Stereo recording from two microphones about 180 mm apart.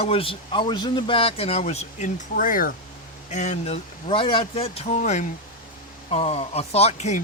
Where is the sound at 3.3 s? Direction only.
40° left (ahead or behind).